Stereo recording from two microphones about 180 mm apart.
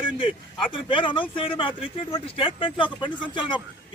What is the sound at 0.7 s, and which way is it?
Speech, 30° left (ahead or behind).